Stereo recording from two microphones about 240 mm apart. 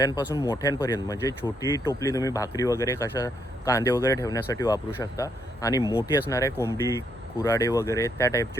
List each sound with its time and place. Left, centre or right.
0.0 s speech: centre